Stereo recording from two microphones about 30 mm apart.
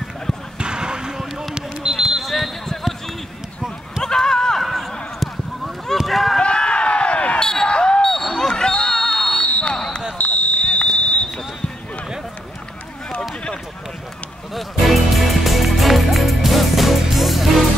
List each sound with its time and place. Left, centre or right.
0.6 s basketball bounce: right
1.9 s basketball bounce: centre
2.2 s basketball bounce: centre
4.0 s run: centre
4.6 s run: centre
6.0 s a sound: centre
6.4 s a sound: left
7.3 s basketball bounce: centre
7.6 s basketball bounce: left
8.0 s basketball bounce: centre
9.5 s basketball bounce: left
10.1 s basketball bounce: left
11.0 s a sound: left
14.5 s music: centre